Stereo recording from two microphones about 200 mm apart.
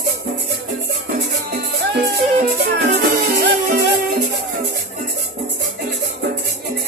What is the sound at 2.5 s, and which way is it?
Music, 50° right (ahead or behind).